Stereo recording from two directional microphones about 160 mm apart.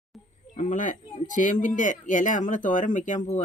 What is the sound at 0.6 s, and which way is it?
Speech, 50° left (ahead or behind).